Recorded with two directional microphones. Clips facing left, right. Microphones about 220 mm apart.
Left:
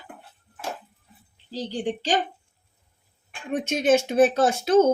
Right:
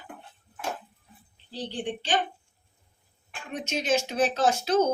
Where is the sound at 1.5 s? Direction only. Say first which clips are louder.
Left 4 dB; 40° left (ahead or behind).